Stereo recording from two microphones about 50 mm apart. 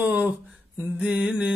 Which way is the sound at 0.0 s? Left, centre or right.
Right.